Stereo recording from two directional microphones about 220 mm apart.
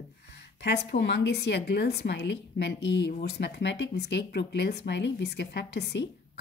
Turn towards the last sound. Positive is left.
turn(degrees=50)  # may be behind; listen again after turning